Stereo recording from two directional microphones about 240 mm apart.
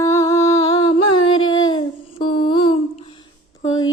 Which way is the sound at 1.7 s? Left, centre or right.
Centre.